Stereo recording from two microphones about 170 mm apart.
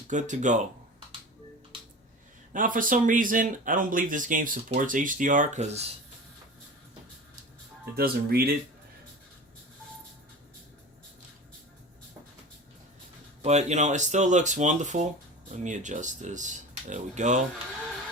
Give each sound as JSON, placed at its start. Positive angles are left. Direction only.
{"t": 0.1, "sound": "speech", "side_deg": -45}
{"t": 1.7, "sound": "a sound", "side_deg": -30}
{"t": 2.5, "sound": "speech", "side_deg": -50}
{"t": 7.9, "sound": "speech", "side_deg": -65}
{"t": 13.4, "sound": "speech", "side_deg": -40}